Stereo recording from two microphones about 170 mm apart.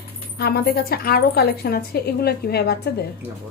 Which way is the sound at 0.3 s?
65° left (ahead or behind).